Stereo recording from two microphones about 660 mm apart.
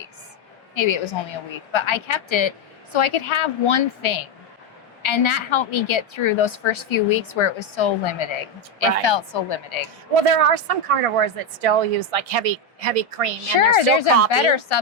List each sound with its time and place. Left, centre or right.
0.7 s a woman's voice: left
10.2 s speech: right
13.7 s a woman's voice: left